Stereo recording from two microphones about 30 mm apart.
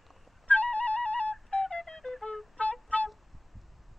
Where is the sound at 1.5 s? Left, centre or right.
Left.